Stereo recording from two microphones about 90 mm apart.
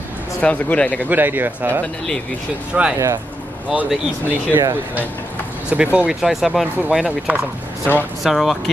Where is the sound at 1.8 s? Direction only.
10° left (ahead or behind).